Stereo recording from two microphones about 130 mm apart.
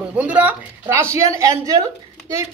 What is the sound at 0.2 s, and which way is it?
A woman's voice, 10° right (ahead or behind).